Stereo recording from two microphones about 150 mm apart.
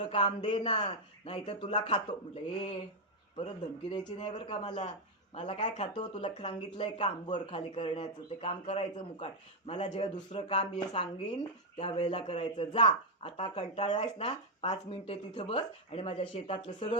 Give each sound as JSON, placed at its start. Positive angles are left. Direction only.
{"t": 0.1, "sound": "speech", "side_deg": 40}
{"t": 5.5, "sound": "speech", "side_deg": 45}
{"t": 5.9, "sound": "speech", "side_deg": 35}
{"t": 10.0, "sound": "speech", "side_deg": 30}